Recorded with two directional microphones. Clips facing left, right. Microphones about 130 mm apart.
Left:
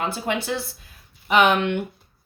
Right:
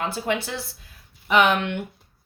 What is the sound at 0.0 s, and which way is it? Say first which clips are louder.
A woman's voice: even; 20° left (ahead or behind).